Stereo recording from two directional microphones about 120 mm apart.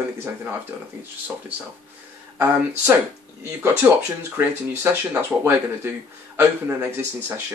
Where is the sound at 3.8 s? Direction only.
20° right (ahead or behind).